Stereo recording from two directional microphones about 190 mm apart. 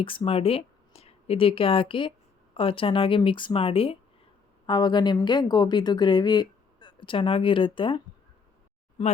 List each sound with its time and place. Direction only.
0.0 s a woman's voice: 30° left (ahead or behind)